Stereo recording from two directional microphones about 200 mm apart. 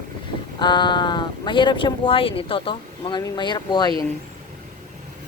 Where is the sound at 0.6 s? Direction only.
20° left (ahead or behind).